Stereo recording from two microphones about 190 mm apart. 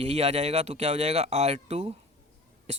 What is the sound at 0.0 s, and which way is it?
Speech, 35° right (ahead or behind).